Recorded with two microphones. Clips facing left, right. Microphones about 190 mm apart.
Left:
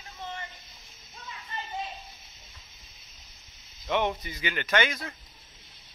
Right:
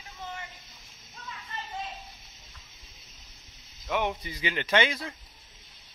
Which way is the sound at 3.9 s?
5° right (ahead or behind).